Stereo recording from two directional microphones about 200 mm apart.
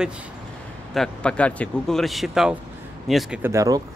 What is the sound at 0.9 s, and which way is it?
Speech, 5° left (ahead or behind).